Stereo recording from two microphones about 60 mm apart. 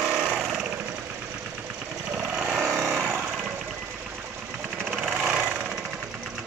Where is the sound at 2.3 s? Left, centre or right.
Centre.